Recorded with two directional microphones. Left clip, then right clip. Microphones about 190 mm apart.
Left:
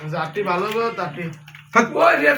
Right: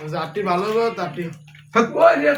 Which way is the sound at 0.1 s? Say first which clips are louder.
Even; 65° right (ahead or behind).